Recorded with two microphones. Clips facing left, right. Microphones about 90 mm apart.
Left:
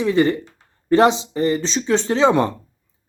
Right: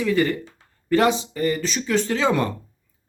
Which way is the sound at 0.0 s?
25° left (ahead or behind).